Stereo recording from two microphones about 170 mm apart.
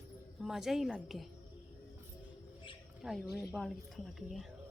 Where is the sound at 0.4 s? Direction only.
Centre (ahead or behind).